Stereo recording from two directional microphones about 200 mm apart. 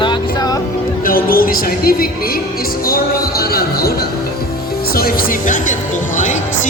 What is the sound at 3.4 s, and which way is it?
Speech, 50° left (ahead or behind).